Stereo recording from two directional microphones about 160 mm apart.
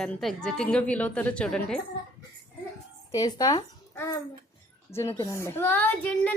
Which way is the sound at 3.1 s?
25° left (ahead or behind).